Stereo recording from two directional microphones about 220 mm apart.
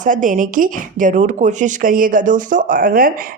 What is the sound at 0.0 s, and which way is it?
Speech, 35° right (ahead or behind).